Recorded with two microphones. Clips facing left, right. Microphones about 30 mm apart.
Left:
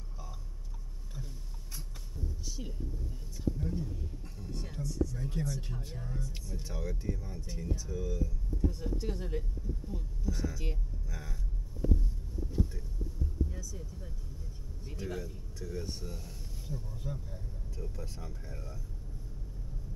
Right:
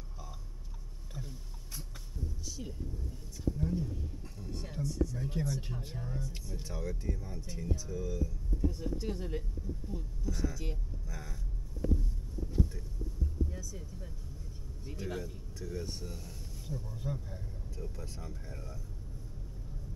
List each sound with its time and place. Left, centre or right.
1.8 s a sound: centre
3.5 s a man's voice: centre
13.5 s a man's voice: centre